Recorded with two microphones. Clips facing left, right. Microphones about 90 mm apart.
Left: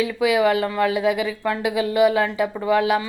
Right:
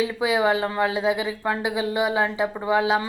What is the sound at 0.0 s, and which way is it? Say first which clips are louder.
Speech: left 3 dB; 25° right (ahead or behind).